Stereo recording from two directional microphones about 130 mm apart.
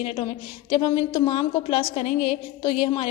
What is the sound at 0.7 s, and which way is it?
A woman's voice, 35° left (ahead or behind).